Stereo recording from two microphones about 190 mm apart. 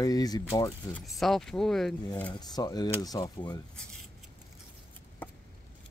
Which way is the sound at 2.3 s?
20° left (ahead or behind).